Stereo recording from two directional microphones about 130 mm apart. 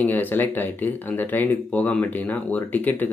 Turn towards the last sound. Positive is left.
turn(degrees=15)  # may be behind; listen again after turning